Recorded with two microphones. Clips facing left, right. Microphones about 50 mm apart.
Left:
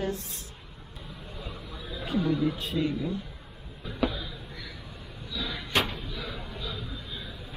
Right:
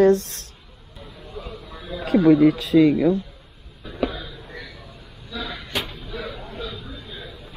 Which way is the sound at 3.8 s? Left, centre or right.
Centre.